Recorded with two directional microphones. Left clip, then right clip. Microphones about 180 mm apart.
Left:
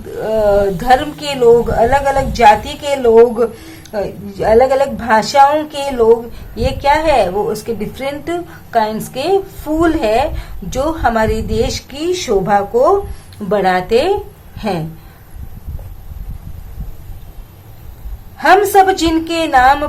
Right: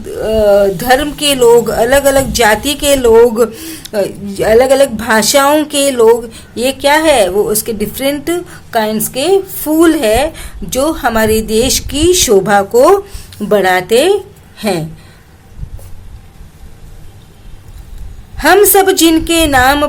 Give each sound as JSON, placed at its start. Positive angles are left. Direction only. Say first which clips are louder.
{"t": 0.1, "sound": "a woman's voice", "louder": "right 4 dB", "side_deg": -35}
{"t": 13.5, "sound": "speech", "louder": "right 3 dB", "side_deg": -35}
{"t": 18.3, "sound": "a woman's voice", "louder": "right 1 dB", "side_deg": -35}